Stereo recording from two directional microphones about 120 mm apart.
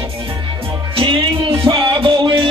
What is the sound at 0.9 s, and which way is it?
Music, 45° right (ahead or behind).